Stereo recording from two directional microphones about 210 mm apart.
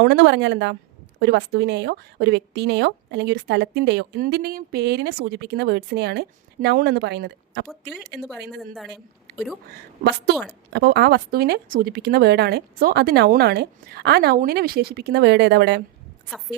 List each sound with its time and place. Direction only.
0.0 s a woman's voice: 55° right (ahead or behind)
8.5 s a woman's voice: centre (ahead or behind)
10.0 s a woman's voice: 50° right (ahead or behind)